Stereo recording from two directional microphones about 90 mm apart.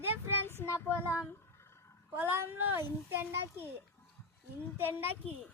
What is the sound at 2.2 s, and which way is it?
Speech, 25° right (ahead or behind).